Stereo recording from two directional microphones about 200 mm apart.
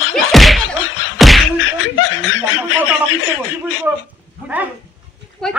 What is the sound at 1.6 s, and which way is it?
Snicker, 75° left (ahead or behind).